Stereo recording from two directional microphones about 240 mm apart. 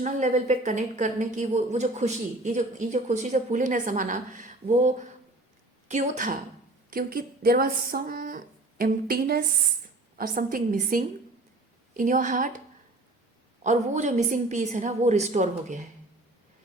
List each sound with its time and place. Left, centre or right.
0.0 s a woman's voice: right
13.7 s a woman's voice: right